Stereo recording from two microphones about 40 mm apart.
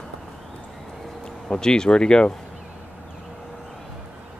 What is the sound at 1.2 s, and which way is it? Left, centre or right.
Speech, centre.